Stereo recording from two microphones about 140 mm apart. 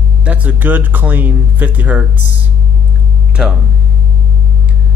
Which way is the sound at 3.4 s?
5° right (ahead or behind).